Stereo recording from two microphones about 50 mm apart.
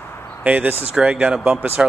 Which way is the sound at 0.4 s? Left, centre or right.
Right.